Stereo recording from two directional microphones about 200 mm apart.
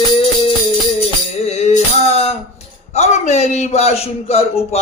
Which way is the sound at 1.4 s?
35° left (ahead or behind).